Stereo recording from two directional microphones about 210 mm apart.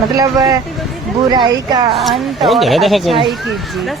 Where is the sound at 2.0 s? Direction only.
Centre (ahead or behind).